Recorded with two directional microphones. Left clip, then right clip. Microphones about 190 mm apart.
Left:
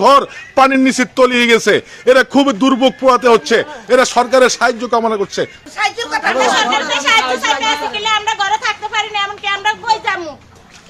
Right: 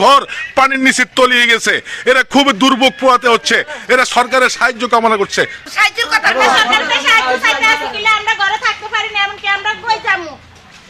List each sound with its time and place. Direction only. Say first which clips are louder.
0.0 s a man's voice: even; centre (ahead or behind)
5.7 s speech: right 5 dB; 25° left (ahead or behind)
6.3 s speech: even; 50° left (ahead or behind)